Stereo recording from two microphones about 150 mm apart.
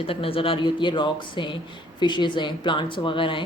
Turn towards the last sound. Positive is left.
turn(degrees=35)  # may be behind; listen again after turning